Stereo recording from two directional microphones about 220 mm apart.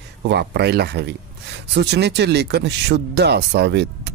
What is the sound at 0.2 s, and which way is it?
Speech, 50° right (ahead or behind).